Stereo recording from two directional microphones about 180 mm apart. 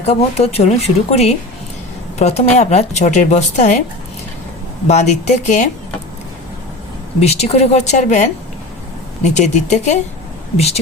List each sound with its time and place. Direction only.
0.0 s a woman's voice: 35° left (ahead or behind)
4.9 s a woman's voice: 40° left (ahead or behind)
7.2 s a woman's voice: 35° left (ahead or behind)